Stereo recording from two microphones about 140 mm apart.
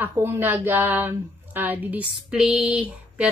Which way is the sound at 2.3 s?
5° right (ahead or behind).